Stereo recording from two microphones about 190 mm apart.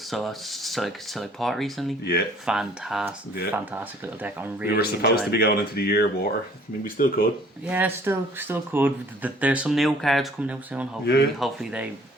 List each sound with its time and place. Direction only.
0.1 s speech: centre (ahead or behind)
4.8 s speech: 55° left (ahead or behind)
7.6 s speech: 10° right (ahead or behind)
11.0 s speech: 60° left (ahead or behind)
11.3 s speech: centre (ahead or behind)